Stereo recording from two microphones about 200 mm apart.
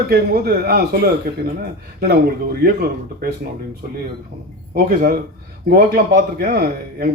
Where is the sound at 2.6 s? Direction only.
50° right (ahead or behind).